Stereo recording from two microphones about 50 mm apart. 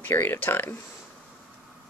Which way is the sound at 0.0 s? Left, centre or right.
Left.